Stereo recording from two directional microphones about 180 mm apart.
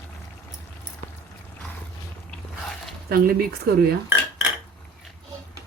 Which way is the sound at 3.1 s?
55° right (ahead or behind).